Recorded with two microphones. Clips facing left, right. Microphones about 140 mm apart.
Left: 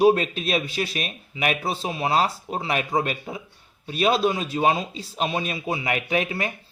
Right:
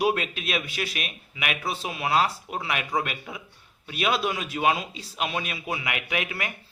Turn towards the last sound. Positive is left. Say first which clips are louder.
# left 5 dB
turn(degrees=30)  # may be behind; listen again after turning